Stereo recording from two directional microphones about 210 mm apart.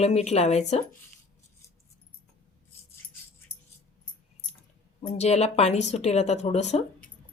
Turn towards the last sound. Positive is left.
turn(degrees=30)  # may be behind; listen again after turning